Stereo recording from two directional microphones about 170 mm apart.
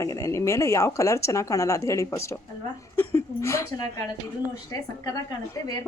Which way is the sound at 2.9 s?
10° left (ahead or behind).